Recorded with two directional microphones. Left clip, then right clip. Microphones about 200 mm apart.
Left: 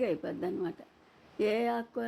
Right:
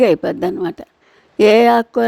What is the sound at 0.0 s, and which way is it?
A woman's voice, 50° right (ahead or behind).